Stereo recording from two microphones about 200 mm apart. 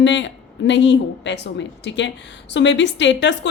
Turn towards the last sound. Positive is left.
turn(degrees=65)  # may be behind; listen again after turning